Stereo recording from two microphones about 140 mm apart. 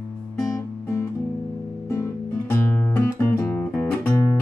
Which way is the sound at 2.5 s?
15° left (ahead or behind).